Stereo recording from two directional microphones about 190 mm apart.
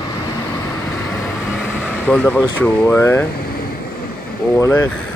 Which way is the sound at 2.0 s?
10° left (ahead or behind).